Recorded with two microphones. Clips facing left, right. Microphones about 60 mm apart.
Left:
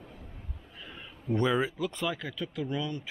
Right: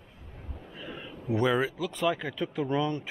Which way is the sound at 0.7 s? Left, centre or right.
Centre.